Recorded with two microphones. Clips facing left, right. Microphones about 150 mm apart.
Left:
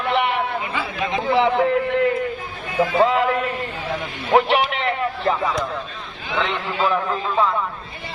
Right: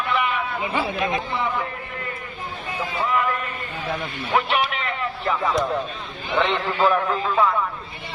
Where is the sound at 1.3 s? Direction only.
85° left.